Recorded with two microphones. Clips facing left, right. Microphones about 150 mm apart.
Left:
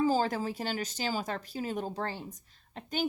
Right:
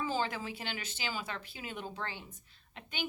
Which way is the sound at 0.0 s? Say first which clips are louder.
Left 7 dB; 40° left (ahead or behind).